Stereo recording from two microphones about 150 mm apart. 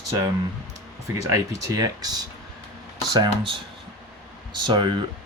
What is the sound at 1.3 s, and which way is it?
Speech, 20° right (ahead or behind).